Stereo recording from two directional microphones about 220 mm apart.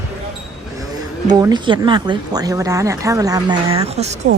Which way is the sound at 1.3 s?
20° right (ahead or behind).